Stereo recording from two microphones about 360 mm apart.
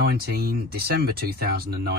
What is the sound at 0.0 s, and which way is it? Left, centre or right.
Speech, right.